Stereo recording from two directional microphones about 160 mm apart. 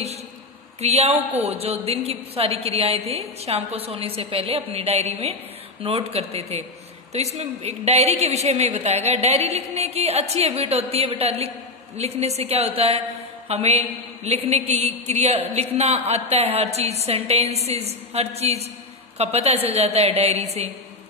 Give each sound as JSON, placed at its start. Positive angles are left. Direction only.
{"t": 0.7, "sound": "a woman's voice", "side_deg": -40}